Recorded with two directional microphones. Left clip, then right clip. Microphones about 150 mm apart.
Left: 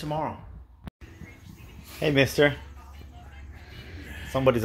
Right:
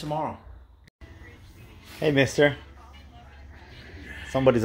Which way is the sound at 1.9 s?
15° right (ahead or behind).